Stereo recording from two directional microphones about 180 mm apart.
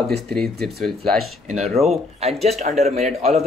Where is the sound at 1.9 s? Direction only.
35° right (ahead or behind).